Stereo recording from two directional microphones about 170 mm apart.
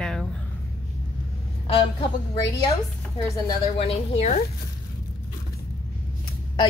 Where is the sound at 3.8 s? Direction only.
35° left (ahead or behind).